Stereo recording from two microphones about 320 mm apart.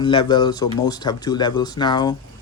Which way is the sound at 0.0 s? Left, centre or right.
Centre.